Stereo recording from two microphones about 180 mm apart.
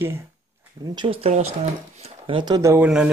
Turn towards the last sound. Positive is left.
turn(degrees=-5)  # may be behind; listen again after turning